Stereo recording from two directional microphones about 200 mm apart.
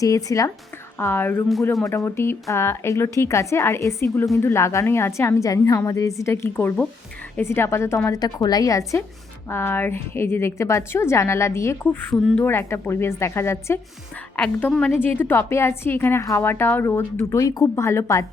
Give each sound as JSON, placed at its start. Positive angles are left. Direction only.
{"t": 0.0, "sound": "a woman's voice", "side_deg": 15}